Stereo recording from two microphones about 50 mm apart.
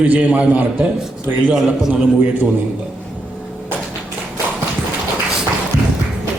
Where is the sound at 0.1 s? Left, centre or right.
Right.